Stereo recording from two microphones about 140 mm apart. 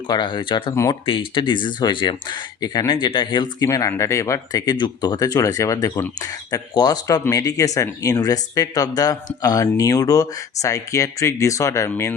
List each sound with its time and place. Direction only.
0.1 s speech: 35° left (ahead or behind)